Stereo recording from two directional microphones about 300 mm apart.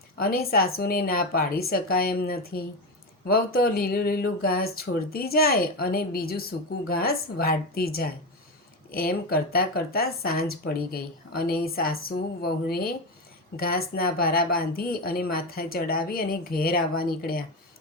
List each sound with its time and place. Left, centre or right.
0.2 s speech: left